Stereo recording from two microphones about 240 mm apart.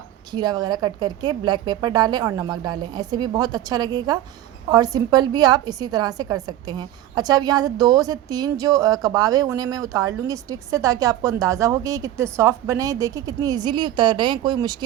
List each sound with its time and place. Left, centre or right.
0.3 s a woman's voice: centre